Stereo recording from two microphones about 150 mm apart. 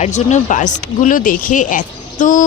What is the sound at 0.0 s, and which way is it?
Speech, 50° left (ahead or behind).